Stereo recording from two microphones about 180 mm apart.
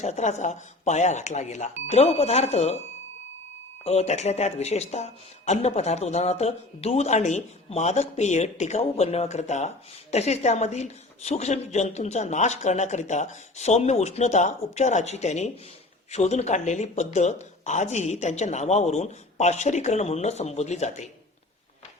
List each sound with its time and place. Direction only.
0.0 s speech: 40° left (ahead or behind)
3.8 s speech: 35° left (ahead or behind)